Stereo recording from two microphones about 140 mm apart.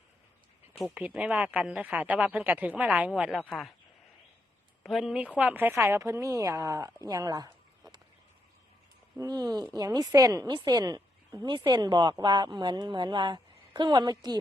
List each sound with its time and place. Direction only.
0.7 s a sound: centre (ahead or behind)
0.9 s speech: 10° right (ahead or behind)
4.8 s a woman's voice: centre (ahead or behind); by 7.5 s 25° right (ahead or behind)
9.1 s a woman's voice: 25° right (ahead or behind)